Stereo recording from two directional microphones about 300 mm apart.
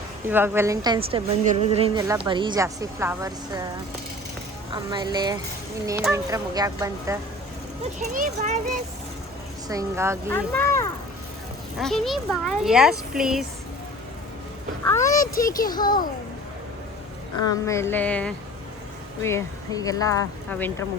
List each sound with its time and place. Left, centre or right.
0.3 s a woman's voice: centre
4.7 s a woman's voice: centre
7.9 s a child's voice: right
9.6 s a woman's voice: centre
10.3 s a child's voice: centre
14.8 s speech: centre
15.2 s a child's voice: left
15.7 s speech: centre
17.5 s a child's voice: centre